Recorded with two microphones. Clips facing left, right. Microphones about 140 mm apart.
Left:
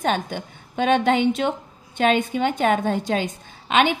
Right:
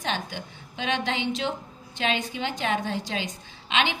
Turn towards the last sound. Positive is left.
turn(degrees=50)  # may be behind; listen again after turning